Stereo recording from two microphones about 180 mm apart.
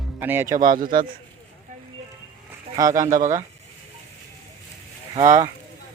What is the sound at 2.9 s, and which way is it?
Speech, 45° right (ahead or behind).